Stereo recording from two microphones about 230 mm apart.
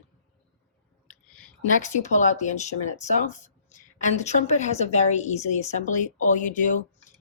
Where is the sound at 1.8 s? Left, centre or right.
Left.